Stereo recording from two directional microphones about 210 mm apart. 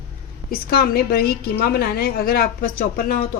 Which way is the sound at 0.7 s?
45° left (ahead or behind).